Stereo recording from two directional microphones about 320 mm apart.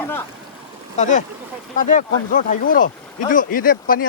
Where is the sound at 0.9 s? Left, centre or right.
Left.